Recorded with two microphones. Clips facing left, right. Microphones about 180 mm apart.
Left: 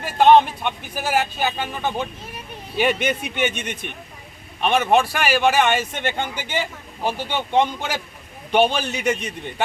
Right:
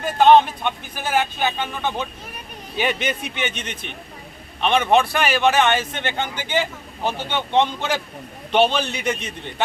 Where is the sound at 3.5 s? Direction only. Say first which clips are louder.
Left 2 dB; 50° left (ahead or behind).